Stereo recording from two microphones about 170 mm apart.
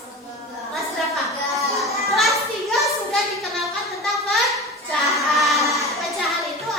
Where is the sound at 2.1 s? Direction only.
Centre (ahead or behind).